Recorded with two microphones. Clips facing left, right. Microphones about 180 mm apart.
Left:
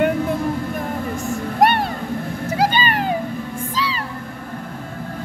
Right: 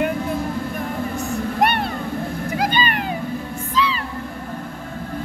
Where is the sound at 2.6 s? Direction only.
40° left (ahead or behind).